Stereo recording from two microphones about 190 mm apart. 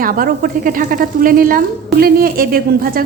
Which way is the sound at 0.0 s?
50° right (ahead or behind).